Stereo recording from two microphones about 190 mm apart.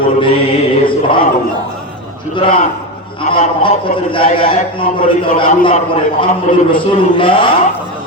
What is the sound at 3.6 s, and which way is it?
A man's voice, 25° left (ahead or behind).